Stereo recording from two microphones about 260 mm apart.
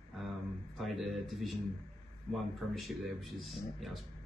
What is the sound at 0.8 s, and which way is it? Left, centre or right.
Speech, centre.